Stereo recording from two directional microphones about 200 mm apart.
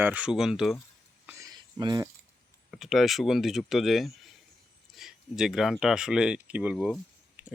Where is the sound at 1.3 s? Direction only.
15° right (ahead or behind).